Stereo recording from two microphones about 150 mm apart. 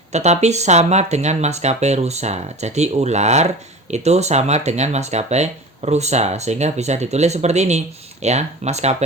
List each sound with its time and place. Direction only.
0.1 s speech: 50° right (ahead or behind)